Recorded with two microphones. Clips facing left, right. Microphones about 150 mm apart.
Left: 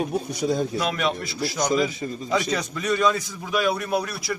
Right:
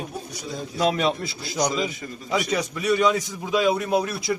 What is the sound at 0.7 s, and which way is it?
A man's voice, 30° right (ahead or behind).